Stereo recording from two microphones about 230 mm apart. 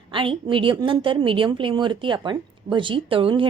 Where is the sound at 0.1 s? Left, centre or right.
Right.